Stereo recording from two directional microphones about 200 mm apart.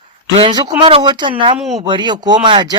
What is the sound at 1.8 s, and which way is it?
Speech, 25° right (ahead or behind).